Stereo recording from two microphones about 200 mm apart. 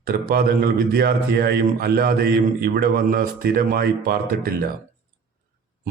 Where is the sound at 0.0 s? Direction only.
45° right (ahead or behind).